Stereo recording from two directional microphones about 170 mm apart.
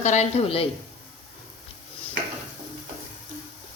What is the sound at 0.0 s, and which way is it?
Speech, 40° left (ahead or behind).